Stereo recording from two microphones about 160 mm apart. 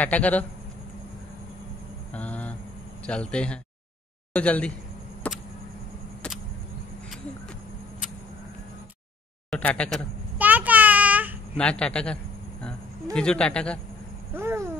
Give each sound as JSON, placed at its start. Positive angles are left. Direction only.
{"t": 0.0, "sound": "a man's voice", "side_deg": 10}
{"t": 2.1, "sound": "a sound", "side_deg": 10}
{"t": 3.1, "sound": "a man's voice", "side_deg": 5}
{"t": 5.2, "sound": "chop", "side_deg": 10}
{"t": 9.5, "sound": "speech", "side_deg": 10}
{"t": 10.4, "sound": "child singing", "side_deg": -10}
{"t": 11.5, "sound": "a man's voice", "side_deg": 5}
{"t": 12.6, "sound": "a sound", "side_deg": 5}
{"t": 14.3, "sound": "owl", "side_deg": -15}